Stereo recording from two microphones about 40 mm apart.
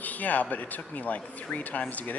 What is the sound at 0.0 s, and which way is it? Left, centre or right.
Speech, left.